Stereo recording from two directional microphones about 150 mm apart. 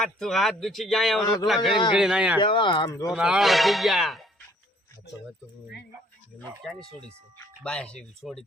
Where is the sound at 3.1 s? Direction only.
5° right (ahead or behind).